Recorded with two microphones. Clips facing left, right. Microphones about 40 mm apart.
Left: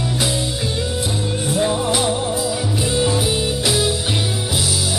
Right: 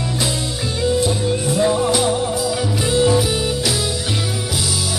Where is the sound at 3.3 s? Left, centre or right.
Centre.